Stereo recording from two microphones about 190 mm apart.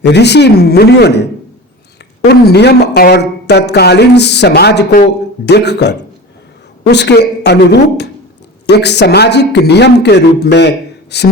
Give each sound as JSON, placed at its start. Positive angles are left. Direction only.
{"t": 0.0, "sound": "speech", "side_deg": 60}